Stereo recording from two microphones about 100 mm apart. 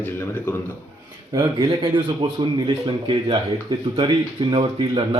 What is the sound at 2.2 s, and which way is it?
Speech, 55° right (ahead or behind).